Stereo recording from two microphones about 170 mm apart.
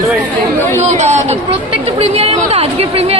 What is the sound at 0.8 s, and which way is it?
A woman's voice, 40° right (ahead or behind).